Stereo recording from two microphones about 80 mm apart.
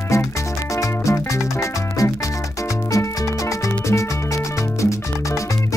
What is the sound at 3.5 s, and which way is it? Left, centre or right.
Music, left.